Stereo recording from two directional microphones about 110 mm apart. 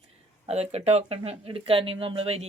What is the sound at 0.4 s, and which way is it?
Speech, 75° right (ahead or behind).